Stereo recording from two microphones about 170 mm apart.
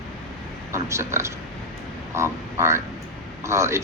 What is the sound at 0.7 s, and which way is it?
A man's voice, 15° right (ahead or behind).